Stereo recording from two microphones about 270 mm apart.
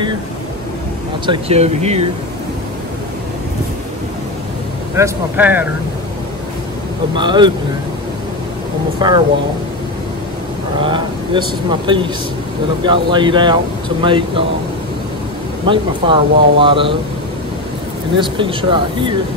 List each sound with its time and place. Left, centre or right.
1.2 s speech: right
4.9 s speech: centre
7.2 s speech: centre
9.0 s speech: centre
10.8 s speech: centre
15.6 s speech: centre
18.1 s speech: centre